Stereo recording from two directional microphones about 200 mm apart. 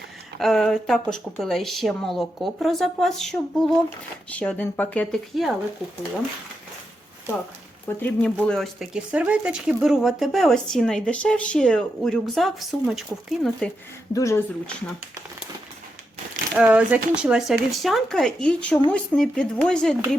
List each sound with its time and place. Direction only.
0.3 s speech: centre (ahead or behind)
7.9 s speech: 10° left (ahead or behind)
14.1 s speech: 15° left (ahead or behind)
16.6 s speech: 5° right (ahead or behind)